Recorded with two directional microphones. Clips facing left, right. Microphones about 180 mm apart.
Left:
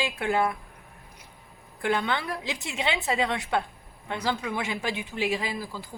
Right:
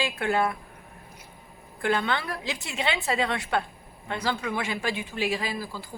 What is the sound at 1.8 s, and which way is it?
A woman's voice, 15° left (ahead or behind).